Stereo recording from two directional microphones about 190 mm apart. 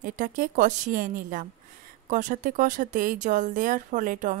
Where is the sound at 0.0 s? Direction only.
45° right (ahead or behind).